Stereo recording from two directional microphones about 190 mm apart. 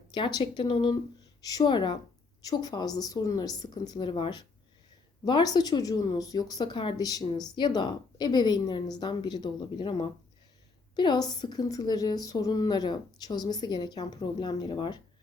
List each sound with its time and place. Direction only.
0.1 s a woman's voice: 25° left (ahead or behind)